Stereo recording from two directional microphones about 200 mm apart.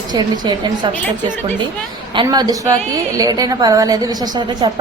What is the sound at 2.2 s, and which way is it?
A woman's voice, 20° right (ahead or behind).